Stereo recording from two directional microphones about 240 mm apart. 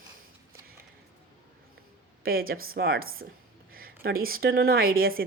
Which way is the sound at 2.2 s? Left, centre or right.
Right.